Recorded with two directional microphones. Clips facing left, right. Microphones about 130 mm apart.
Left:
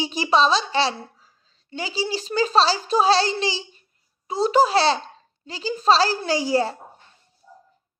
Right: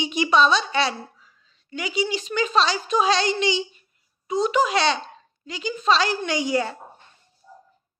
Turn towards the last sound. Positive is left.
turn(degrees=30)  # may be behind; listen again after turning